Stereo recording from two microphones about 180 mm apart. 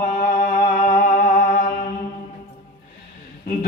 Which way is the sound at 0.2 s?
45° left (ahead or behind).